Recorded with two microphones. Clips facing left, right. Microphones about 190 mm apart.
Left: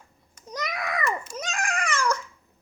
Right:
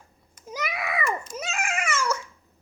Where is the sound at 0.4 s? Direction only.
5° right (ahead or behind).